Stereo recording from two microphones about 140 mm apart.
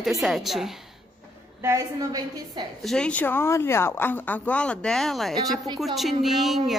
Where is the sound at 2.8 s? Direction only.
5° left (ahead or behind).